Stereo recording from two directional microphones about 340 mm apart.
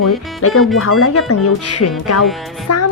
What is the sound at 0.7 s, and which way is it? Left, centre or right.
Speech, left.